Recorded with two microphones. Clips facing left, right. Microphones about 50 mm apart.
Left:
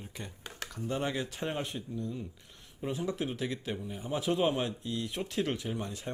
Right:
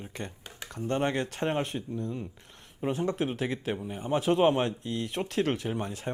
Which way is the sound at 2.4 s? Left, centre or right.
Right.